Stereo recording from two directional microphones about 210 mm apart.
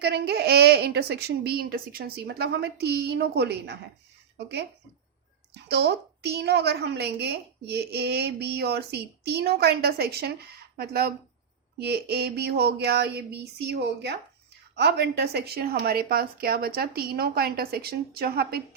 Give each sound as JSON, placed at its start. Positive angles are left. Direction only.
{"t": 0.0, "sound": "a woman's voice", "side_deg": -50}
{"t": 5.6, "sound": "a woman's voice", "side_deg": -50}